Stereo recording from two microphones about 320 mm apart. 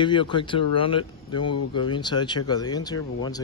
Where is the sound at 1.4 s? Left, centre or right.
Left.